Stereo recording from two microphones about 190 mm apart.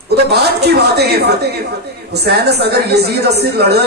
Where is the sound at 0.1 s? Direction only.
55° right (ahead or behind).